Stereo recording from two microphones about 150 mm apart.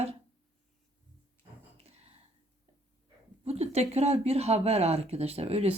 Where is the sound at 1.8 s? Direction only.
45° right (ahead or behind).